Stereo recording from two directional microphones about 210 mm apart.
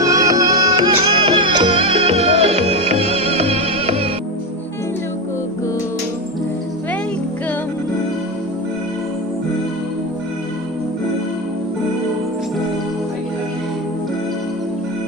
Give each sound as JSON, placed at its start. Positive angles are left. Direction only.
{"t": 0.0, "sound": "music", "side_deg": -15}